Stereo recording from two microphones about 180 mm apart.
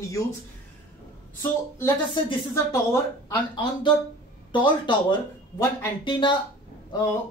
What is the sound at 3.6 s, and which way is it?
Speech, 25° left (ahead or behind).